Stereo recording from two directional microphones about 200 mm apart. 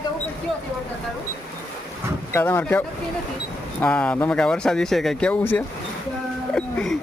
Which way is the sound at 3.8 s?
5° left (ahead or behind).